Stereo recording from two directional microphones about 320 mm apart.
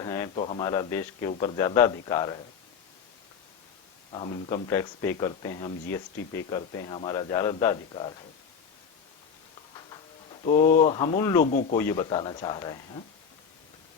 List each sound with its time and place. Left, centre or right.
0.0 s speech: centre
4.1 s speech: centre
10.4 s speech: centre